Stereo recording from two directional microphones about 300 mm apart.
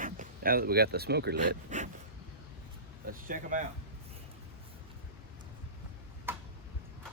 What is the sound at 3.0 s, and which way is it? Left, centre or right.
Speech, right.